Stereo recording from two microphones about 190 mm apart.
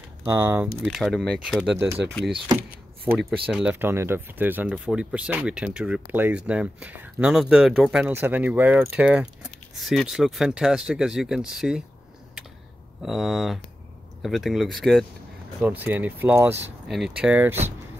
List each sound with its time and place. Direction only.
0.3 s speech: 15° right (ahead or behind)
0.8 s speech: 5° left (ahead or behind)
2.3 s speech: 20° right (ahead or behind)
3.1 s speech: 5° right (ahead or behind)
13.0 s speech: centre (ahead or behind)